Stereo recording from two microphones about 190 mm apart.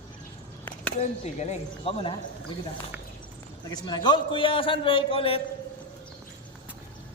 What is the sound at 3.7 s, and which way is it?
A man's voice, 20° left (ahead or behind).